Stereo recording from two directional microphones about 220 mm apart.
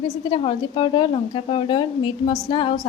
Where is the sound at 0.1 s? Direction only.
25° left (ahead or behind).